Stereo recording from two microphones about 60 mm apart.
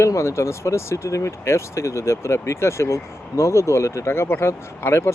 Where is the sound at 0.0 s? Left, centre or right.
Left.